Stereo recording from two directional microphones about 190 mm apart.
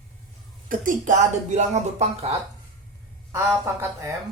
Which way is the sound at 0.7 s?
40° right (ahead or behind).